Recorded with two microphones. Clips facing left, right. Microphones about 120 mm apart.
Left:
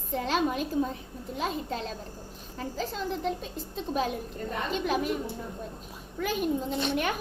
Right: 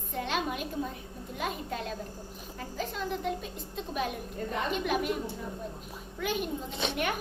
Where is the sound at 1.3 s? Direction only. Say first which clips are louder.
Left 3 dB; 30° left (ahead or behind).